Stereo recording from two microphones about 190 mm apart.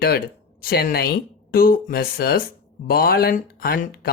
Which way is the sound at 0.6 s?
50° left (ahead or behind).